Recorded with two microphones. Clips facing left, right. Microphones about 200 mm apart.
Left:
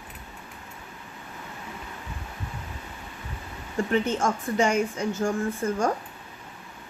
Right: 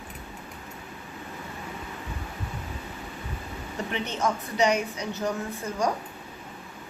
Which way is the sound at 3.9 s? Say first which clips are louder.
Left 4 dB; 50° left (ahead or behind).